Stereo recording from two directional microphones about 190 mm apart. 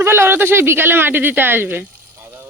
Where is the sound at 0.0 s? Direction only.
10° right (ahead or behind).